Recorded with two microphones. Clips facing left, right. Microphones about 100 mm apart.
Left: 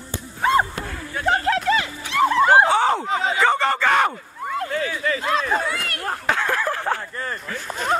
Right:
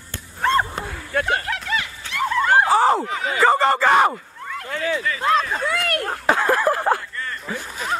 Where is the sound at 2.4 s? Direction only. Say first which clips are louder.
Left 2 dB; 20° left (ahead or behind).